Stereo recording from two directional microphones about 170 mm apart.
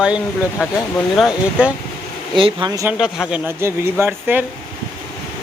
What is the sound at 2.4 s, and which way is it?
Speech, 30° right (ahead or behind).